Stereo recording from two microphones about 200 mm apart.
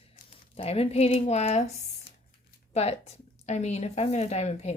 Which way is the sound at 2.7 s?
30° left (ahead or behind).